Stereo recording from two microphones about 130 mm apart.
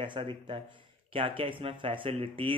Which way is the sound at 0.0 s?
40° right (ahead or behind).